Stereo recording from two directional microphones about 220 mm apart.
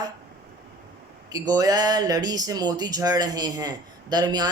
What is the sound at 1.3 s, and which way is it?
Speech, 15° right (ahead or behind).